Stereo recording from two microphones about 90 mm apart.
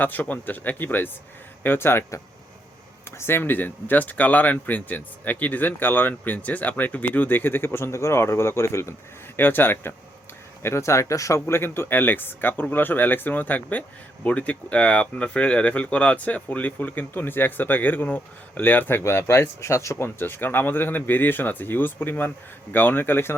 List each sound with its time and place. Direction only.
0.0 s speech: 20° left (ahead or behind)